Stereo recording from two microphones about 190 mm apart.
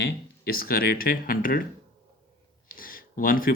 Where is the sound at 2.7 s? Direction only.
50° left (ahead or behind).